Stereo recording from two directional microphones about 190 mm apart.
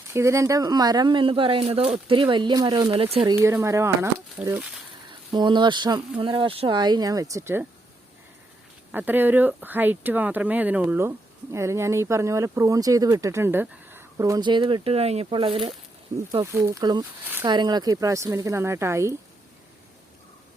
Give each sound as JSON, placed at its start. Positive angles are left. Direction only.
{"t": 0.1, "sound": "speech", "side_deg": -15}
{"t": 3.4, "sound": "speech", "side_deg": -15}
{"t": 5.3, "sound": "speech", "side_deg": -25}
{"t": 8.9, "sound": "speech", "side_deg": -10}